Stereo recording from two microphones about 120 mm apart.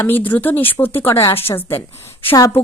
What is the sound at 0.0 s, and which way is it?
A woman's voice, 15° left (ahead or behind).